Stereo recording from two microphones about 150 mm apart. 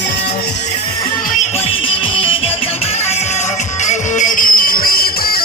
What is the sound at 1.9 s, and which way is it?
Music, 40° left (ahead or behind).